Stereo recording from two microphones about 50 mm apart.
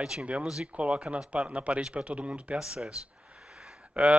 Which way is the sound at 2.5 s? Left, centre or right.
Centre.